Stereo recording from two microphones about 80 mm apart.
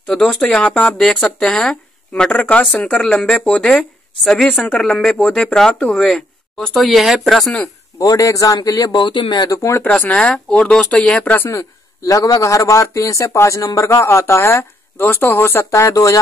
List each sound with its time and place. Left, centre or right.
0.0 s speech: centre
8.0 s a man's voice: left
8.9 s speech: left
9.8 s speech: centre
12.1 s speech: left
15.7 s a man's voice: left